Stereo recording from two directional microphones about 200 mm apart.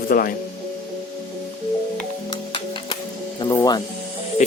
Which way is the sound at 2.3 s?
25° left (ahead or behind).